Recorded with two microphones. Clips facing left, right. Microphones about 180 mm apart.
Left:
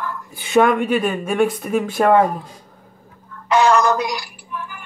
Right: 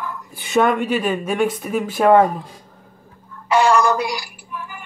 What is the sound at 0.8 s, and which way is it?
Speech, 50° left (ahead or behind).